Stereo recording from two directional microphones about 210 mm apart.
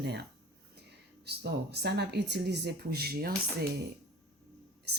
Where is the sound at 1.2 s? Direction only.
50° right (ahead or behind).